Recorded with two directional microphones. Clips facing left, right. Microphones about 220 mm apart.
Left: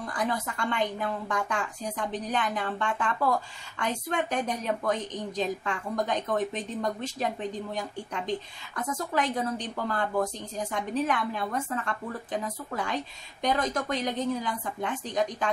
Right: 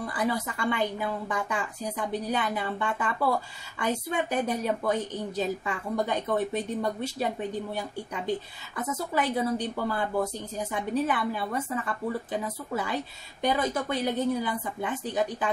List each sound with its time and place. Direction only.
0.0 s a woman's voice: 10° right (ahead or behind)